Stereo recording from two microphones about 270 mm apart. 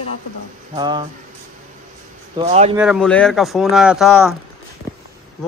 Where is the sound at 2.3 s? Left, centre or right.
Right.